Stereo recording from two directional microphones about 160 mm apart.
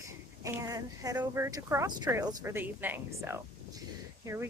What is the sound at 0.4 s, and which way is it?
Speech, 20° right (ahead or behind).